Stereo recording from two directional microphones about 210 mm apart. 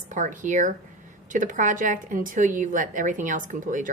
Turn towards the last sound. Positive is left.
turn(degrees=-40)  # may be behind; listen again after turning